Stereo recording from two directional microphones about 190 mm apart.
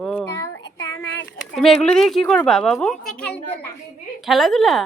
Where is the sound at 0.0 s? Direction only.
5° left (ahead or behind).